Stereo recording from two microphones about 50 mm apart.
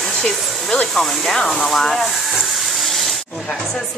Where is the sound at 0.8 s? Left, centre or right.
Centre.